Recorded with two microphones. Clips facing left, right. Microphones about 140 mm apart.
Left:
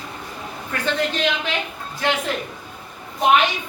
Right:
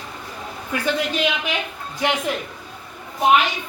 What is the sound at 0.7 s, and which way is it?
A woman's voice, 10° right (ahead or behind).